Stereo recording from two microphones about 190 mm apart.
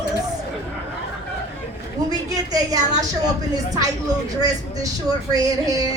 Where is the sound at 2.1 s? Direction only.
20° right (ahead or behind).